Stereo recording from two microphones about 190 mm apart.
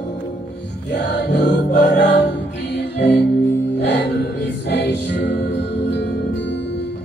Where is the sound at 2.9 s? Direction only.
65° left (ahead or behind).